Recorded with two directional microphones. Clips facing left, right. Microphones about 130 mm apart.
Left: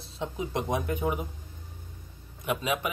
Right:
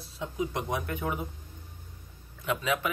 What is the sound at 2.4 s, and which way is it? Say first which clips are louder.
Speech: even; 15° left (ahead or behind).